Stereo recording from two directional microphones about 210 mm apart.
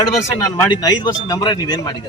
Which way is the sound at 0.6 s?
20° left (ahead or behind).